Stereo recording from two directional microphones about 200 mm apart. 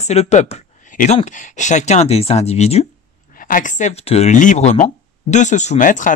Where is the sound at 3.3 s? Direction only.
45° left (ahead or behind).